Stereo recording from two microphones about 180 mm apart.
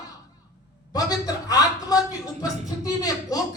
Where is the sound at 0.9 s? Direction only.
20° left (ahead or behind).